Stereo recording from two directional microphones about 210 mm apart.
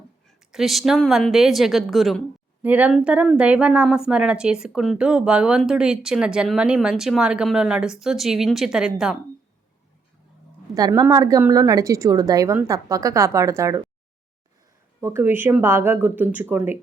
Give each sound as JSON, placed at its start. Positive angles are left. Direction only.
{"t": 0.3, "sound": "speech", "side_deg": 0}
{"t": 10.8, "sound": "a woman's voice", "side_deg": -20}
{"t": 15.0, "sound": "a woman's voice", "side_deg": -10}